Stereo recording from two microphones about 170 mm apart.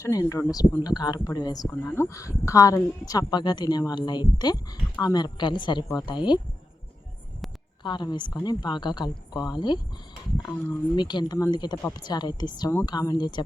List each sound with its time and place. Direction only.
0.0 s speech: 20° left (ahead or behind)
7.9 s speech: 25° left (ahead or behind)
10.9 s speech: 25° left (ahead or behind)